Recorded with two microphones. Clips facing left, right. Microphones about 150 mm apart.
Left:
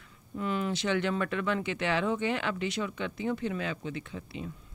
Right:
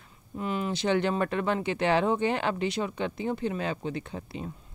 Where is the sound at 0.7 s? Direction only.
35° right (ahead or behind).